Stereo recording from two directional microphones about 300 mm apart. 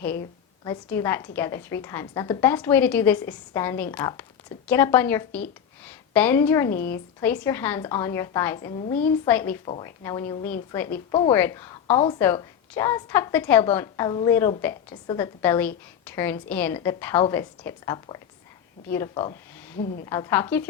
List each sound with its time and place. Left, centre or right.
0.6 s a woman's voice: centre